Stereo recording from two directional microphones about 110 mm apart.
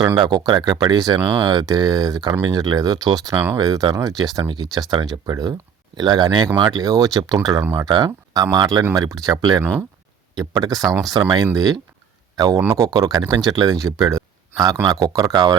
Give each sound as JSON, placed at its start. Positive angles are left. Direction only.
{"t": 0.2, "sound": "speech", "side_deg": -45}
{"t": 7.6, "sound": "speech", "side_deg": -20}
{"t": 7.9, "sound": "speech", "side_deg": -40}